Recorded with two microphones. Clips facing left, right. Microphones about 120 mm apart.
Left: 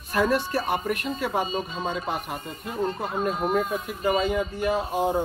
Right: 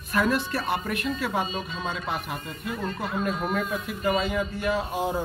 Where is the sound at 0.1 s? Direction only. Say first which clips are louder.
Left 2 dB; 30° left (ahead or behind).